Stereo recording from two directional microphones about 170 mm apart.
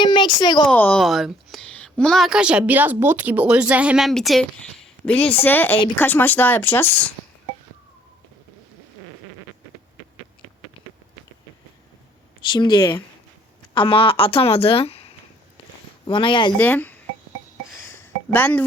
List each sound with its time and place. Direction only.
0.0 s speech: 25° left (ahead or behind)
0.7 s a woman's voice: 10° left (ahead or behind)
12.5 s a woman's voice: 30° left (ahead or behind)
16.6 s speech: 10° left (ahead or behind)
17.8 s a sound: 10° left (ahead or behind)